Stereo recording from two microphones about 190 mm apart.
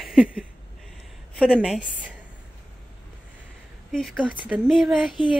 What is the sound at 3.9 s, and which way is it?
Speech, centre (ahead or behind).